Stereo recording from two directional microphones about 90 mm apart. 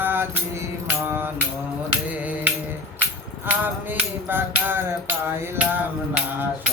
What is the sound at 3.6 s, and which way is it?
Music, 25° right (ahead or behind).